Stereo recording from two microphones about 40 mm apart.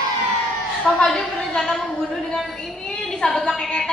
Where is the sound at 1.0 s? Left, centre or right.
Centre.